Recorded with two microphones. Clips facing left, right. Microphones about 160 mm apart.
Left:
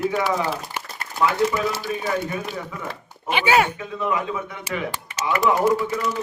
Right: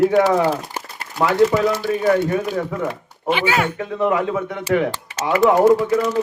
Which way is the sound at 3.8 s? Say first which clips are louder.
Right 6 dB; 65° right (ahead or behind).